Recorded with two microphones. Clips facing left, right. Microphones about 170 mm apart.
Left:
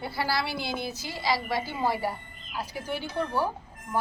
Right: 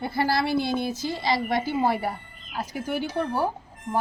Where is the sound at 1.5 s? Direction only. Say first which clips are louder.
Right 5 dB; 55° right (ahead or behind).